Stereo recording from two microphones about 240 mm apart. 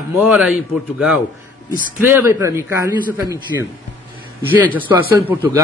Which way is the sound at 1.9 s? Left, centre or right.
Centre.